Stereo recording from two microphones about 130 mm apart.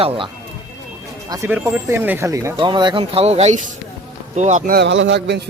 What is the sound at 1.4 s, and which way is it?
Speech, 15° right (ahead or behind).